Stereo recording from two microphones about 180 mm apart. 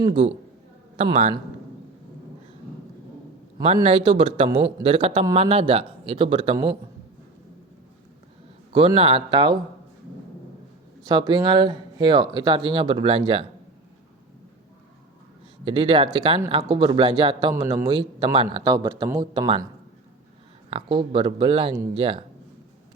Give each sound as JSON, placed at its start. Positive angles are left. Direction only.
{"t": 0.0, "sound": "speech", "side_deg": -30}
{"t": 3.8, "sound": "speech", "side_deg": -30}
{"t": 8.7, "sound": "speech", "side_deg": -30}
{"t": 11.0, "sound": "speech", "side_deg": -25}
{"t": 15.6, "sound": "speech", "side_deg": -30}
{"t": 17.5, "sound": "speech", "side_deg": -15}
{"t": 20.7, "sound": "speech", "side_deg": -30}